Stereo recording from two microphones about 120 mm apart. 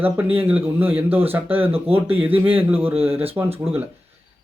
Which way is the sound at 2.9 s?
55° right (ahead or behind).